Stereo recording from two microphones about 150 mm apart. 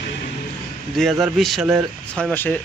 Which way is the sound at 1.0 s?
Centre (ahead or behind).